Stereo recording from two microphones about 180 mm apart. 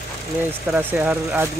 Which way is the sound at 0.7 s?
10° right (ahead or behind).